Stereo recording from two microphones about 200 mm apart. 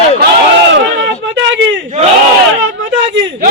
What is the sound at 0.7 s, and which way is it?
Speech, 65° right (ahead or behind).